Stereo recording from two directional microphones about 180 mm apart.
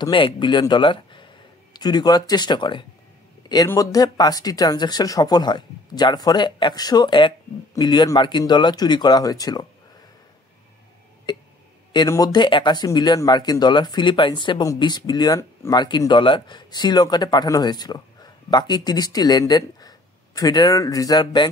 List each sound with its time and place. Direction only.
0.0 s speech: 25° left (ahead or behind)
11.9 s speech: 20° left (ahead or behind)